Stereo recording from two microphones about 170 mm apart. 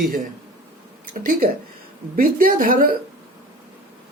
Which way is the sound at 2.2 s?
55° right (ahead or behind).